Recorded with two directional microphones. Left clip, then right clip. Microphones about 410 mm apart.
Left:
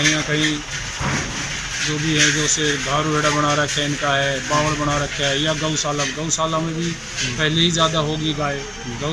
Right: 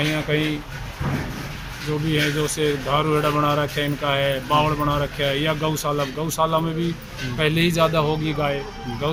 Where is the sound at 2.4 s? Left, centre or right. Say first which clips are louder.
Left 3 dB; centre.